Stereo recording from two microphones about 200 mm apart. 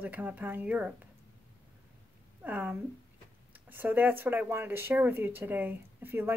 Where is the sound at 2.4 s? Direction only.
10° right (ahead or behind).